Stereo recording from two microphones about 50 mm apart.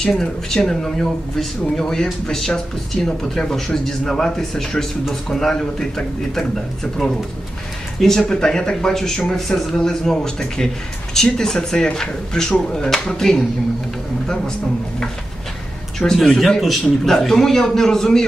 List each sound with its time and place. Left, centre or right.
0.0 s speech: centre
16.1 s speech: centre